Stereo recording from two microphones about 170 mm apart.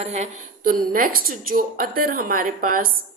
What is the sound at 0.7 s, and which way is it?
A woman's voice, 55° right (ahead or behind).